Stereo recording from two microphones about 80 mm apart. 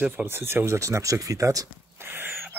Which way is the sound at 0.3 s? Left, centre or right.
Right.